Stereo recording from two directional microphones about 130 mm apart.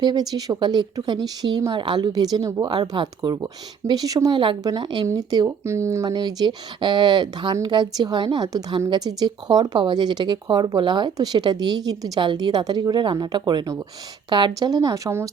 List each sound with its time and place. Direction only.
0.0 s speech: 30° right (ahead or behind)